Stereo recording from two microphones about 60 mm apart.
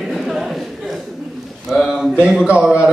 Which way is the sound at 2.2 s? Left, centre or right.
Right.